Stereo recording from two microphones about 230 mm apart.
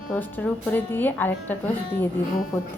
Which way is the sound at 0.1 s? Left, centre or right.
Centre.